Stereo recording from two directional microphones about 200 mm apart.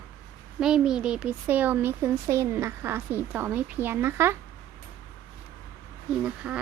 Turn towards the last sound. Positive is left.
turn(degrees=-5)  # may be behind; listen again after turning